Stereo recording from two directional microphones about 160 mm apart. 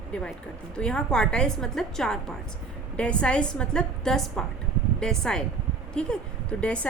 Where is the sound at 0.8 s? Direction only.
5° left (ahead or behind).